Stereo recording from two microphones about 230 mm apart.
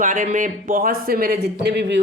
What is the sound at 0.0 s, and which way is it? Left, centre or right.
Speech, right.